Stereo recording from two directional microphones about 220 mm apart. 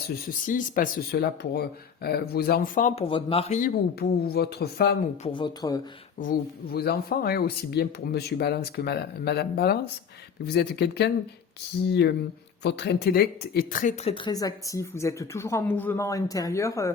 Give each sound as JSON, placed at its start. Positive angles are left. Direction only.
{"t": 0.0, "sound": "speech", "side_deg": 40}
{"t": 3.6, "sound": "speech", "side_deg": 45}
{"t": 5.2, "sound": "speech", "side_deg": 20}
{"t": 6.7, "sound": "speech", "side_deg": 45}
{"t": 14.1, "sound": "a woman's voice", "side_deg": 20}